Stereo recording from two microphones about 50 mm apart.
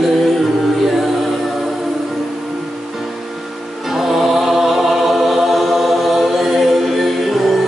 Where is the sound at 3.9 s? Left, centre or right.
Centre.